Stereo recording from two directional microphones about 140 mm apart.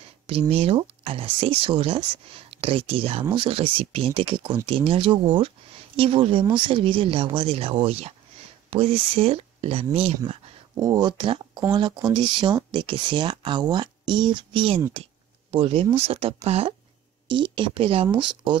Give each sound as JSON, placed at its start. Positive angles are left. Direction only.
{"t": 0.3, "sound": "speech", "side_deg": -45}
{"t": 10.8, "sound": "speech", "side_deg": -30}
{"t": 17.3, "sound": "speech", "side_deg": -35}